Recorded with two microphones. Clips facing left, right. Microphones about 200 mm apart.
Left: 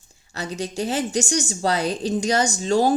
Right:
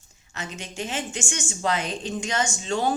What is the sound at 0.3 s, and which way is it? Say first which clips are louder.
A woman's voice: left 7 dB; 35° left (ahead or behind).